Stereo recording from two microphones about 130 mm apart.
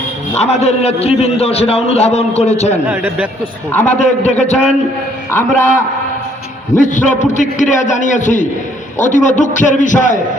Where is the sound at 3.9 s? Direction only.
60° left (ahead or behind).